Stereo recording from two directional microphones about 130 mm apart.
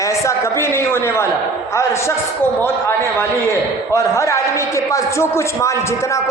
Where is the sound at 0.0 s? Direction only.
25° left (ahead or behind).